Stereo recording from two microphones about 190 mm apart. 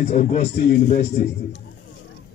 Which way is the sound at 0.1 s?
40° left (ahead or behind).